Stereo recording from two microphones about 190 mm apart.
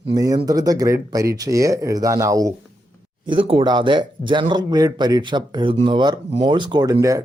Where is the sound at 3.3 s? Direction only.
30° right (ahead or behind).